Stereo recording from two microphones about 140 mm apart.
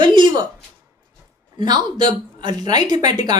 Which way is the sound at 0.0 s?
35° right (ahead or behind).